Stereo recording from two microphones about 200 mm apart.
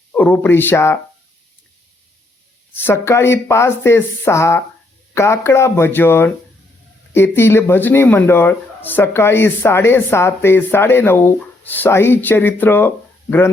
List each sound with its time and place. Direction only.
0.1 s speech: 10° left (ahead or behind)
2.7 s speech: 10° left (ahead or behind)